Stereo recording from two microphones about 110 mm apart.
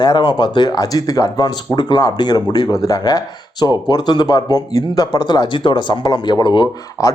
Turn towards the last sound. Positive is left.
turn(degrees=30)  # may be behind; listen again after turning